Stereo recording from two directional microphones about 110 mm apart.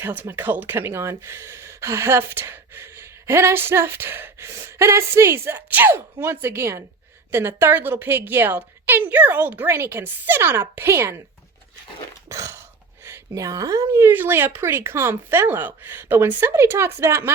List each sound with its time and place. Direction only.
0.0 s speech: 20° right (ahead or behind)
12.3 s a sound: 25° right (ahead or behind)
13.1 s speech: 25° right (ahead or behind)